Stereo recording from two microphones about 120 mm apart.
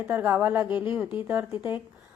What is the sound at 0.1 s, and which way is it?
Speech, 15° right (ahead or behind).